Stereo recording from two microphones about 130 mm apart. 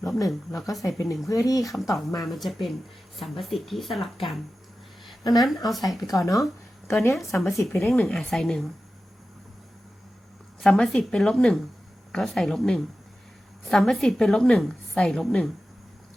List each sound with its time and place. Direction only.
0.3 s a woman's voice: centre (ahead or behind)
0.7 s speech: 25° left (ahead or behind)
1.6 s a woman's voice: centre (ahead or behind)
5.2 s a woman's voice: 30° left (ahead or behind); by 8.7 s 5° left (ahead or behind)
10.6 s a woman's voice: 5° left (ahead or behind)